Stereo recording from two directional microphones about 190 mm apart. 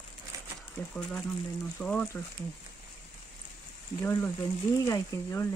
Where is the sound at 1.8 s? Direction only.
5° left (ahead or behind).